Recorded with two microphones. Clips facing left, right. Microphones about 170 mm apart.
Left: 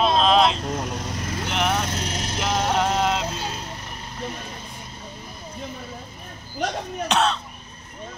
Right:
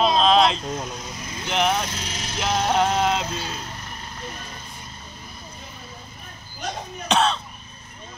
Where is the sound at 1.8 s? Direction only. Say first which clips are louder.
Left 4 dB; 55° left (ahead or behind).